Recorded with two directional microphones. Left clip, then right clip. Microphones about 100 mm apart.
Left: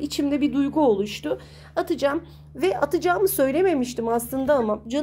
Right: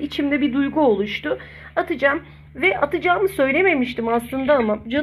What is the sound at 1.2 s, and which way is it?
Speech, 40° left (ahead or behind).